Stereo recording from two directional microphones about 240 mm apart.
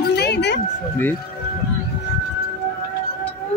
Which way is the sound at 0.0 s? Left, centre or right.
Left.